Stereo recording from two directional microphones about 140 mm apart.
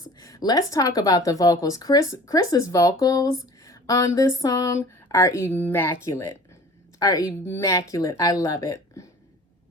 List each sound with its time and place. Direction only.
0.2 s speech: 25° left (ahead or behind)